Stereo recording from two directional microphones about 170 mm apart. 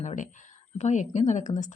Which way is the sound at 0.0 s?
45° left (ahead or behind).